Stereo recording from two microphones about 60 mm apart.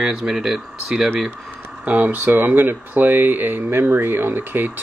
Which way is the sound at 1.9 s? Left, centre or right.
Right.